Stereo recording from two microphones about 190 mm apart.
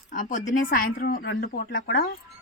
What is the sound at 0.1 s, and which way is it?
A woman's voice, 45° left (ahead or behind).